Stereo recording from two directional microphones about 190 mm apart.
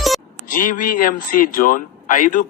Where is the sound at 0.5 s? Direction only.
45° left (ahead or behind).